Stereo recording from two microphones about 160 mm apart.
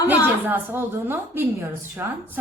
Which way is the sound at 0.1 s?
10° right (ahead or behind).